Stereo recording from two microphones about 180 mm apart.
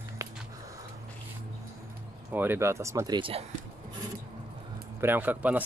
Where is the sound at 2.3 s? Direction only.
10° right (ahead or behind); by 3.4 s 25° right (ahead or behind).